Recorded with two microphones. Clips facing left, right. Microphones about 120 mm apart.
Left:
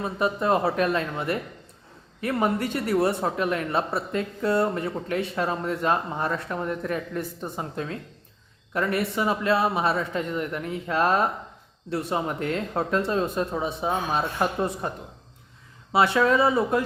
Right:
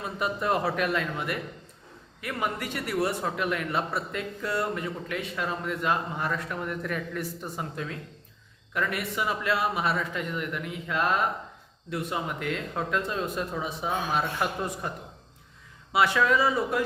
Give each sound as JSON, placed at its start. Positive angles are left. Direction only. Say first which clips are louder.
{"t": 0.0, "sound": "speech", "louder": "left 5 dB", "side_deg": 30}